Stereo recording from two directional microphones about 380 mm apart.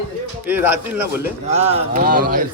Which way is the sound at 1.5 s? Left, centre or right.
Centre.